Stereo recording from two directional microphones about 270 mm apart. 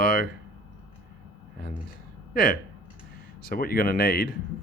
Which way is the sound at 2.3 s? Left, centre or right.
Left.